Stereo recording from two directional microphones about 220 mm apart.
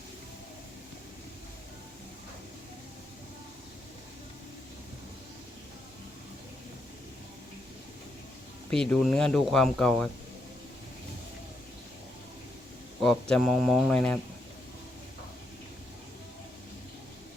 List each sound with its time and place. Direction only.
8.7 s speech: 5° left (ahead or behind)
13.0 s speech: centre (ahead or behind)